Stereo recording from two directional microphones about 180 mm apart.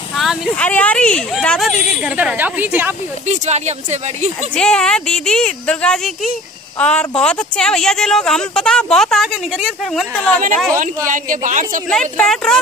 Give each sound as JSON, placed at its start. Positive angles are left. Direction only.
{"t": 0.1, "sound": "speech", "side_deg": 0}
{"t": 3.3, "sound": "speech", "side_deg": -40}
{"t": 4.6, "sound": "speech", "side_deg": 5}
{"t": 11.1, "sound": "a man's voice", "side_deg": -45}
{"t": 11.9, "sound": "speech", "side_deg": 5}